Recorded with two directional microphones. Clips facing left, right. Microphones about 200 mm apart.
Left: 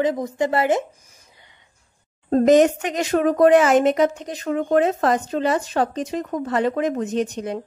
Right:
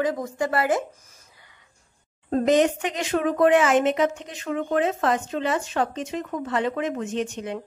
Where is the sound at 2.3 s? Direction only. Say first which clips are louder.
Left 5 dB; 45° left (ahead or behind).